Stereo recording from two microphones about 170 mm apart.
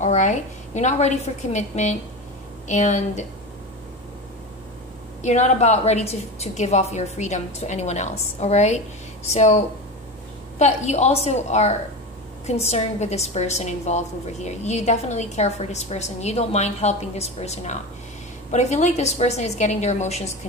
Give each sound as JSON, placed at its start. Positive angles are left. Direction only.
{"t": 0.0, "sound": "a woman's voice", "side_deg": 45}
{"t": 5.2, "sound": "a woman's voice", "side_deg": 45}
{"t": 10.6, "sound": "a woman's voice", "side_deg": 40}